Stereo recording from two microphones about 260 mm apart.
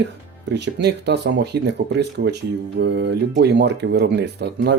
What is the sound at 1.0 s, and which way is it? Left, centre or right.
Speech, right.